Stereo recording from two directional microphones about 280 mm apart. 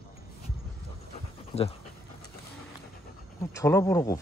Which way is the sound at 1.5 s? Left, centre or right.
Left.